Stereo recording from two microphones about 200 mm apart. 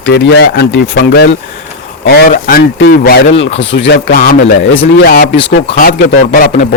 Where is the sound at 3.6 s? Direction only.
70° left (ahead or behind).